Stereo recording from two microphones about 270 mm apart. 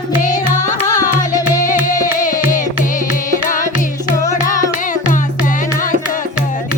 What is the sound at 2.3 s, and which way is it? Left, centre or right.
Music, centre.